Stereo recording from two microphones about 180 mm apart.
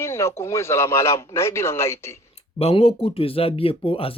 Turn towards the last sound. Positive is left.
turn(degrees=30)  # may be behind; listen again after turning